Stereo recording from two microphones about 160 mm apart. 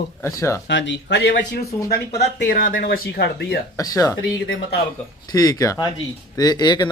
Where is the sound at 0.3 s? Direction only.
20° left (ahead or behind).